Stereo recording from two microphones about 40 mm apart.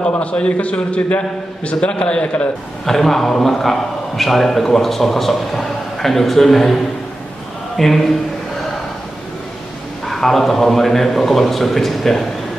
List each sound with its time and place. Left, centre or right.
0.1 s a man's voice: left
2.8 s a man's voice: centre
10.0 s a man's voice: centre